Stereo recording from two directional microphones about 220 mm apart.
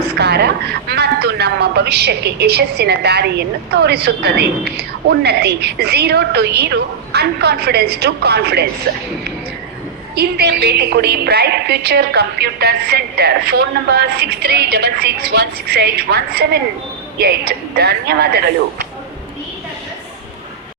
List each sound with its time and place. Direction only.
0.2 s speech: 50° right (ahead or behind)
10.2 s speech: 45° right (ahead or behind)